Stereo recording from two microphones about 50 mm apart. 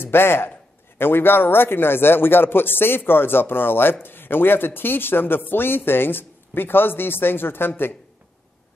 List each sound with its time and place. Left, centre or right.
0.0 s speech: left